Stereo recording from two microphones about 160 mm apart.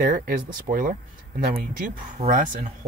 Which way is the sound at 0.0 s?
60° right (ahead or behind).